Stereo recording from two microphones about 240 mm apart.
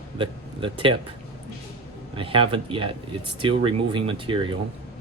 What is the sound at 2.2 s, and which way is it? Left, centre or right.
Speech, right.